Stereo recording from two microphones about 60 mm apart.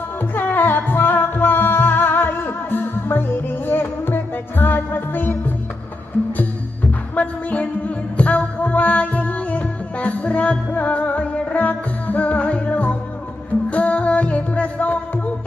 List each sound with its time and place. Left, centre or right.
0.3 s music: left
7.2 s music: left